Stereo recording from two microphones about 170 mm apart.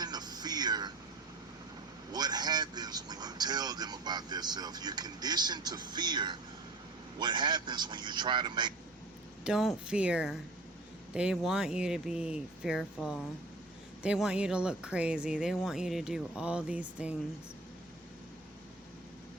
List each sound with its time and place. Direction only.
0.0 s a sound: 25° right (ahead or behind)
2.1 s speech: 25° right (ahead or behind)
9.4 s speech: centre (ahead or behind)